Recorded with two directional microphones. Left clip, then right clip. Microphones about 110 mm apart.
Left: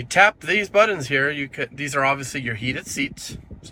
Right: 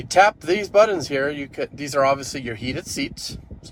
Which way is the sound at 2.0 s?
30° right (ahead or behind).